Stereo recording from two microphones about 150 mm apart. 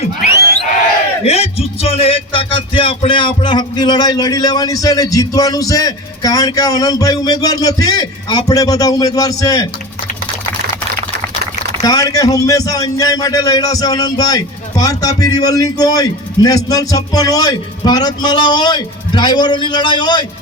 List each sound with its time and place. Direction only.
1.2 s music: 40° left (ahead or behind); by 9.6 s 25° left (ahead or behind)
11.8 s music: 25° left (ahead or behind)